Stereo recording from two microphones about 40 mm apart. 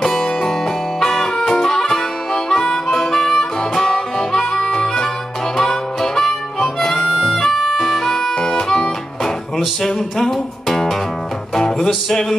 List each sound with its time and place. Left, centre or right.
0.0 s music: centre
1.5 s harmonica: centre
7.8 s music: centre
8.4 s harmonica: centre
9.8 s music: centre